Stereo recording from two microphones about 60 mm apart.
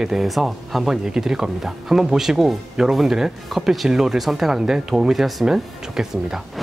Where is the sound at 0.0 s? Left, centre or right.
Centre.